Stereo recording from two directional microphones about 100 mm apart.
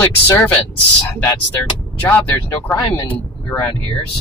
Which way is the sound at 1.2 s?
20° left (ahead or behind).